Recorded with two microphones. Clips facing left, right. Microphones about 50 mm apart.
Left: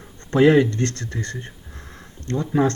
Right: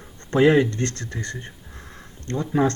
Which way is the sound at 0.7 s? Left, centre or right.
Right.